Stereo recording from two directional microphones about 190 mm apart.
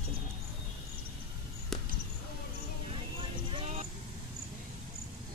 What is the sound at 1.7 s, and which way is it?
Basketball bounce, centre (ahead or behind).